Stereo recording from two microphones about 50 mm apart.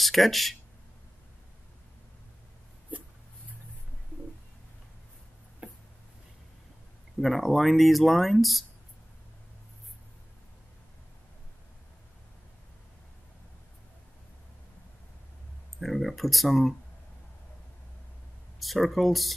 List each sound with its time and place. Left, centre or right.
0.0 s speech: centre
5.6 s a sound: right
7.2 s speech: centre
15.8 s speech: centre
18.6 s speech: centre